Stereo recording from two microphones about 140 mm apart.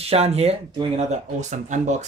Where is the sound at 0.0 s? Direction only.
45° right (ahead or behind).